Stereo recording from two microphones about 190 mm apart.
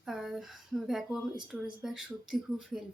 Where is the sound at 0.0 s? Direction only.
Centre (ahead or behind).